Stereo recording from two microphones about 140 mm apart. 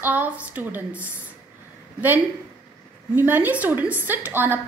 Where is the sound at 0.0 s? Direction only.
10° right (ahead or behind).